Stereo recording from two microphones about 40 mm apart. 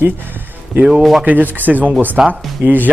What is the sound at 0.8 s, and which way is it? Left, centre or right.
Speech, right.